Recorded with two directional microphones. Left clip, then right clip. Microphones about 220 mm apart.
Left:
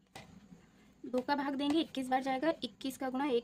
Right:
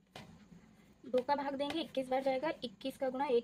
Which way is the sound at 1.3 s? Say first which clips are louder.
Left 2 dB; 40° left (ahead or behind).